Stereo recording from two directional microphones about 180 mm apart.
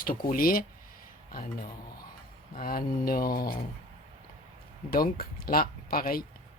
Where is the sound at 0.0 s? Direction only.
50° left (ahead or behind).